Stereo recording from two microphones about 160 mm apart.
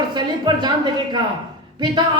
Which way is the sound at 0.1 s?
25° right (ahead or behind).